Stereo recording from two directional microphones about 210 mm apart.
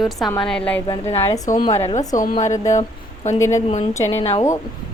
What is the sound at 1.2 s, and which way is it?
Speech, 15° left (ahead or behind).